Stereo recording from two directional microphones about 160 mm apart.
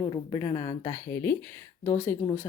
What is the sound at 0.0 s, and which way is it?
Speech, 25° left (ahead or behind).